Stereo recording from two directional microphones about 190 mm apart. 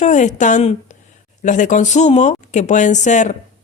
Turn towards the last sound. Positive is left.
turn(degrees=40)  # may be behind; listen again after turning